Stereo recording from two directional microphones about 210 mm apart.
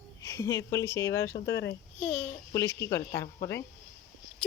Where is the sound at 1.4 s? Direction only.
55° left (ahead or behind).